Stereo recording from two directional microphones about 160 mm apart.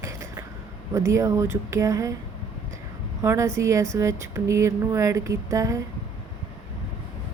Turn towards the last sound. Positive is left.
turn(degrees=-20)  # may be behind; listen again after turning